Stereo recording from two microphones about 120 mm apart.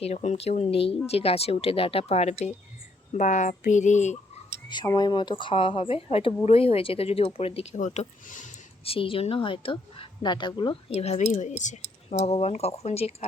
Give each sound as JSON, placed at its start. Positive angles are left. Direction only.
{"t": 0.0, "sound": "a woman's voice", "side_deg": 65}
{"t": 3.2, "sound": "speech", "side_deg": 90}
{"t": 4.9, "sound": "speech", "side_deg": 35}
{"t": 8.8, "sound": "a woman's voice", "side_deg": 50}